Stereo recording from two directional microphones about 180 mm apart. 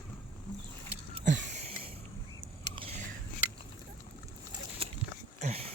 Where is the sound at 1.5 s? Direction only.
35° right (ahead or behind).